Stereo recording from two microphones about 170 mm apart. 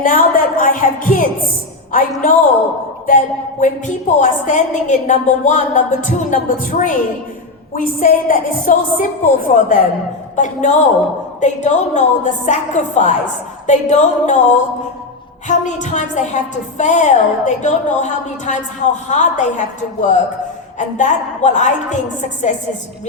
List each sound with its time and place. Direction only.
0.0 s a woman's voice: 50° left (ahead or behind)